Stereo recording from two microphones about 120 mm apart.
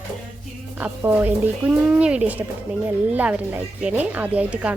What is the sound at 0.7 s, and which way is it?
Speech, 15° right (ahead or behind).